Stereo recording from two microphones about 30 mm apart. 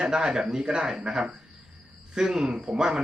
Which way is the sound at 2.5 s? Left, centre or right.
Right.